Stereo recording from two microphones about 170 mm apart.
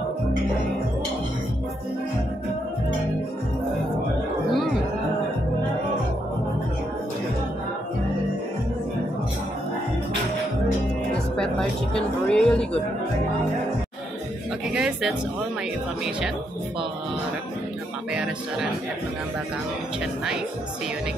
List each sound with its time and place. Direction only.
11.3 s a woman's voice: 5° left (ahead or behind)
14.7 s speech: 5° right (ahead or behind)
18.1 s speech: 5° right (ahead or behind)